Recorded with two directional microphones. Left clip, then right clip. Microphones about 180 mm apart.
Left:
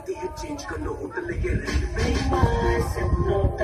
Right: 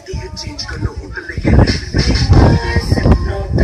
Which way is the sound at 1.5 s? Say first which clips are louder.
Right 13 dB; 50° left (ahead or behind).